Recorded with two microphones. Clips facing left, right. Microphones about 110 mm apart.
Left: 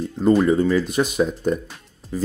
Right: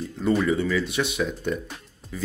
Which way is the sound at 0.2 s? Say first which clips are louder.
Left 6 dB; 40° left (ahead or behind).